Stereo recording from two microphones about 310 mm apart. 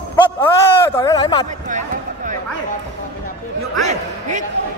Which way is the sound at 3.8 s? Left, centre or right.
Right.